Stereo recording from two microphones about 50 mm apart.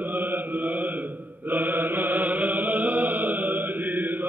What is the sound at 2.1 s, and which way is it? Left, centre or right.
Music, right.